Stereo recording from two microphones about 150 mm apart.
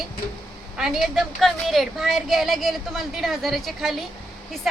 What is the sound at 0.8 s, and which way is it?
A woman's voice, centre (ahead or behind).